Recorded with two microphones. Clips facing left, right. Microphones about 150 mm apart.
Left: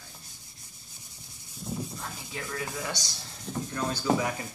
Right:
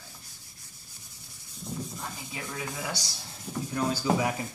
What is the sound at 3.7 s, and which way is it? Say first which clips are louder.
Speech: right 1 dB; 10° right (ahead or behind).